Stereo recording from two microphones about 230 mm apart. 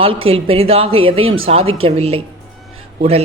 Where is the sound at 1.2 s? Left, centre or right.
Right.